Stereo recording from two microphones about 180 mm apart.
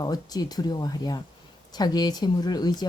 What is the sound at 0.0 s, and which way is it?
Speech, 20° left (ahead or behind).